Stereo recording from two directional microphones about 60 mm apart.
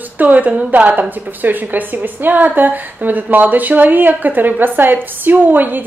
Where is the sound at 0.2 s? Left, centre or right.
Right.